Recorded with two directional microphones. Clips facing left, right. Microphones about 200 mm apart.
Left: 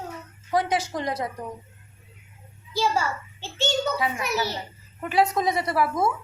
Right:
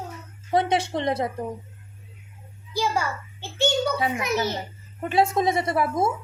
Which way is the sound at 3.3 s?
15° right (ahead or behind).